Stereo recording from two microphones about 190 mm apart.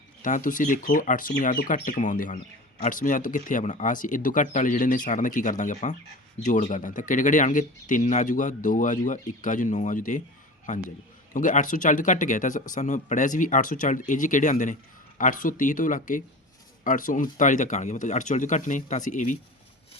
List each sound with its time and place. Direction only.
0.2 s speech: 45° left (ahead or behind)